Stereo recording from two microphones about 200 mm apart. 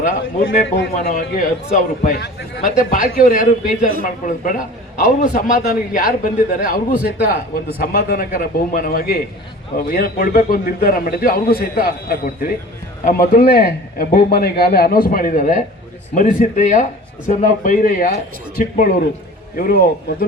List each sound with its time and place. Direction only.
0.6 s a man's voice: 50° left (ahead or behind)